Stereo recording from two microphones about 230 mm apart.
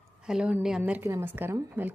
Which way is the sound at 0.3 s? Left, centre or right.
Centre.